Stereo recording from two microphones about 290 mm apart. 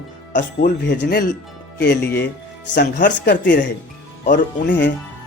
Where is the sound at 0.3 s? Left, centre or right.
Left.